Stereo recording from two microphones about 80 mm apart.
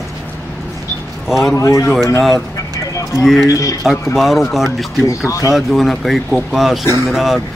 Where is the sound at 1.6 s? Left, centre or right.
Left.